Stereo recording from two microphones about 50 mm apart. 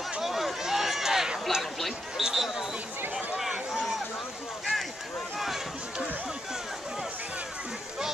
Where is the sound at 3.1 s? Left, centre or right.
Centre.